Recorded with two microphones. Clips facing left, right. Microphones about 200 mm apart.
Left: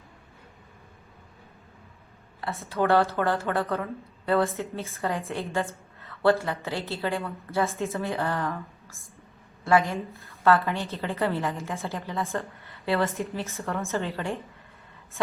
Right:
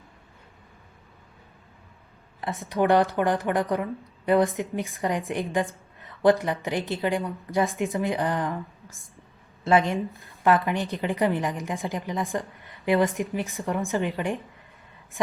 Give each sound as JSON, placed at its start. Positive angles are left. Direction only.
{"t": 2.4, "sound": "a woman's voice", "side_deg": -15}
{"t": 9.6, "sound": "a woman's voice", "side_deg": -20}